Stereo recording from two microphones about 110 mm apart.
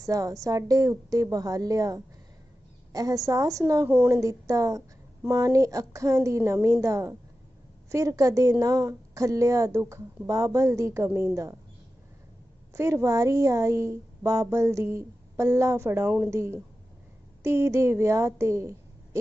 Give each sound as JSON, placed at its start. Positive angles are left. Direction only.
{"t": 0.0, "sound": "a woman's voice", "side_deg": -30}
{"t": 12.7, "sound": "a woman's voice", "side_deg": -25}